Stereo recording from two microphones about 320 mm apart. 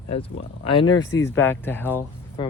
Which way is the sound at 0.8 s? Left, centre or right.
Centre.